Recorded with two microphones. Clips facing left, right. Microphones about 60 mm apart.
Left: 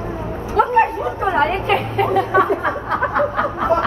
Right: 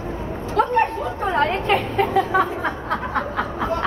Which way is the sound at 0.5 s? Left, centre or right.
Centre.